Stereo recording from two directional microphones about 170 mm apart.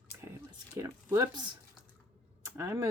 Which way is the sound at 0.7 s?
20° right (ahead or behind).